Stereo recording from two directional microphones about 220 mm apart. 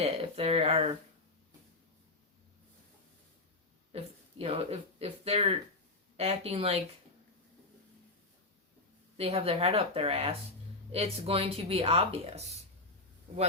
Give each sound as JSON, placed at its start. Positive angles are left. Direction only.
{"t": 0.0, "sound": "speech", "side_deg": -25}
{"t": 3.9, "sound": "speech", "side_deg": -25}
{"t": 9.1, "sound": "speech", "side_deg": -25}